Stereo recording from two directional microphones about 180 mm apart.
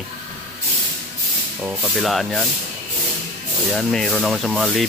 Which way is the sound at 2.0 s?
Centre (ahead or behind).